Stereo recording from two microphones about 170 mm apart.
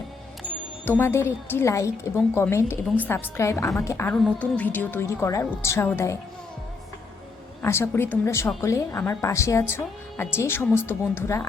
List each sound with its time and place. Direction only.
0.9 s a woman's voice: 15° left (ahead or behind)
7.6 s a woman's voice: 15° left (ahead or behind)